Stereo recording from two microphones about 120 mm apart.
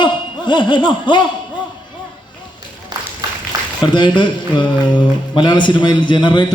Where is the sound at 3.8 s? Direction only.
40° left (ahead or behind).